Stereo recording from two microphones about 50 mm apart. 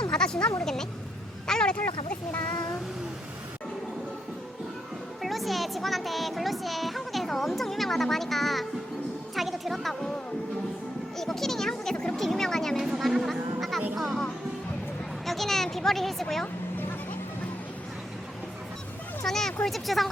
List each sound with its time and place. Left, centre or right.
0.1 s a sound: centre
0.6 s a child's voice: centre
5.2 s a child's voice: centre
9.3 s music: centre
11.2 s a child's voice: centre
12.7 s a sound: centre
13.9 s music: centre
15.3 s speech: centre
19.2 s a child's voice: centre